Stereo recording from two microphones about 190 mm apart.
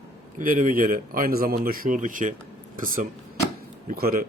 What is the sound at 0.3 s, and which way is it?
A man's voice, 45° right (ahead or behind).